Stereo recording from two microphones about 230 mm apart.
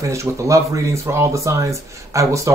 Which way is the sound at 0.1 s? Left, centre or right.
Centre.